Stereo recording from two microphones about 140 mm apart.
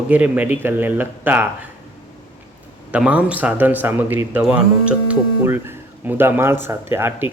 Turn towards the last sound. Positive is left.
turn(degrees=-15)  # may be behind; listen again after turning